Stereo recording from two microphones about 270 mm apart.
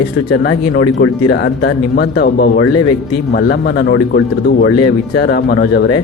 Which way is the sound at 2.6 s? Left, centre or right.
Left.